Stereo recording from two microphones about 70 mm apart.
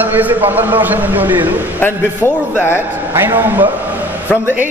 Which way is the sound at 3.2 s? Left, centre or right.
Right.